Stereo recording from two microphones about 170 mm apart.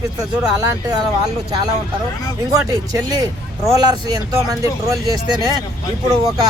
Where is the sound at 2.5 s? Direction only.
20° right (ahead or behind).